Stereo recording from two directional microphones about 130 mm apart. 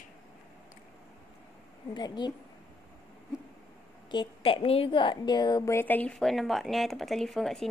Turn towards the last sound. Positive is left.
turn(degrees=5)  # may be behind; listen again after turning